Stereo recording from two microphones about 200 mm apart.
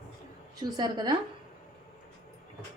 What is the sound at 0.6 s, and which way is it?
Speech, 20° right (ahead or behind).